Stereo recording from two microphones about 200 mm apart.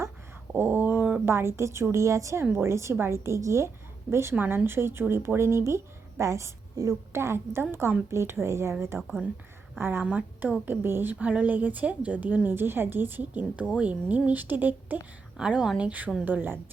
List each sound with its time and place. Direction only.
0.5 s a woman's voice: 10° right (ahead or behind)